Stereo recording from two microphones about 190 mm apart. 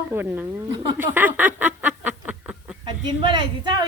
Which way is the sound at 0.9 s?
10° right (ahead or behind).